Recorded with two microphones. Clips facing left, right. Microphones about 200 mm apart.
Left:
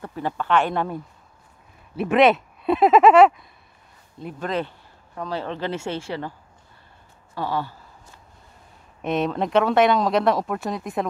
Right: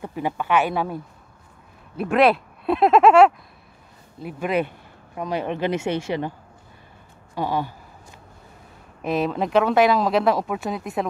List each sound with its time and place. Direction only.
0.0 s speech: 15° right (ahead or behind)
2.0 s speech: centre (ahead or behind); by 6.3 s 20° right (ahead or behind)
7.3 s a sound: 15° right (ahead or behind)
9.0 s speech: centre (ahead or behind)